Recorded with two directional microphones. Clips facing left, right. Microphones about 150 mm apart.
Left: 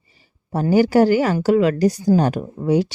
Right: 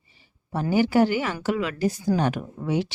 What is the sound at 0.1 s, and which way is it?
A woman's voice, 40° left (ahead or behind).